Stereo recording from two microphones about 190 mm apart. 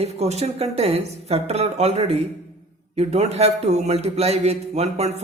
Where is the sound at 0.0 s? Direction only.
35° right (ahead or behind).